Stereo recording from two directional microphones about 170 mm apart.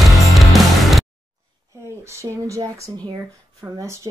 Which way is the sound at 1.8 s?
15° right (ahead or behind).